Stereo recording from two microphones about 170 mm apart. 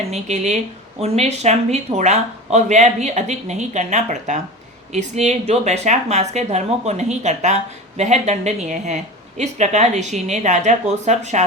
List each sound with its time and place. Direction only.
0.1 s speech: 45° right (ahead or behind)